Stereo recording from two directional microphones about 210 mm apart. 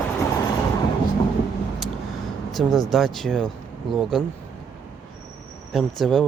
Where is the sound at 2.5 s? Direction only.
Centre (ahead or behind).